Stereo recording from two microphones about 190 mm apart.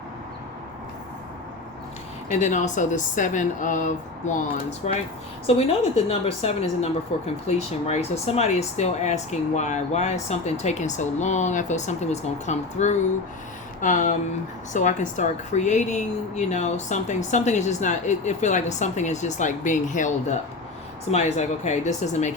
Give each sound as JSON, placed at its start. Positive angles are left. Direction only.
{"t": 2.3, "sound": "a woman's voice", "side_deg": 40}